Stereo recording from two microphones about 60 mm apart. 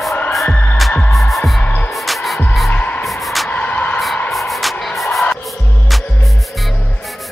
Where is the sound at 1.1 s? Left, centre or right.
Centre.